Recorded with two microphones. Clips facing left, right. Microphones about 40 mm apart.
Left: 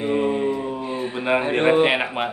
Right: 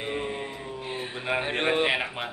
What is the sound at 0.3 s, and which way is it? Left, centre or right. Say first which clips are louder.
Music: left 12 dB; centre.